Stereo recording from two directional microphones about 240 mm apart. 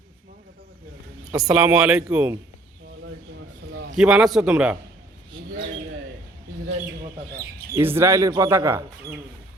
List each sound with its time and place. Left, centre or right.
1.3 s speech: centre
3.7 s a sound: right
3.9 s speech: centre
7.7 s speech: centre